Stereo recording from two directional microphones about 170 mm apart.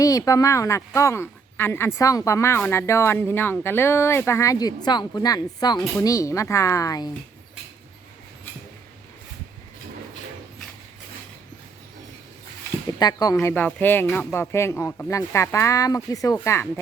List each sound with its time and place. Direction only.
0.0 s a woman's voice: 20° left (ahead or behind)
13.0 s speech: 25° left (ahead or behind)
13.4 s a woman's voice: 10° left (ahead or behind)